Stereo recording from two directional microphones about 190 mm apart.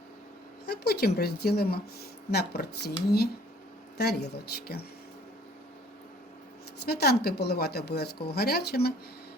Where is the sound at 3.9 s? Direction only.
60° left (ahead or behind).